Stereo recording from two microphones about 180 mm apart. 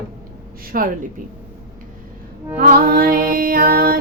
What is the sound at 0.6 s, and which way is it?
Music, 50° right (ahead or behind).